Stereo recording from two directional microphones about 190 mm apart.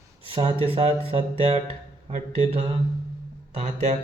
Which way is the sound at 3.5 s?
40° right (ahead or behind).